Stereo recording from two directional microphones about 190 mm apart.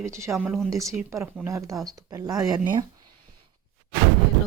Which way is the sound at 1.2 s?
10° right (ahead or behind).